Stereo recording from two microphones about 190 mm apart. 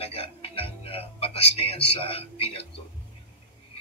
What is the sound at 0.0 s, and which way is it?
Music, 30° left (ahead or behind).